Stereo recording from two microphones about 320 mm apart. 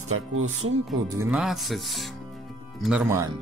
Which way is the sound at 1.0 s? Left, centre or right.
Centre.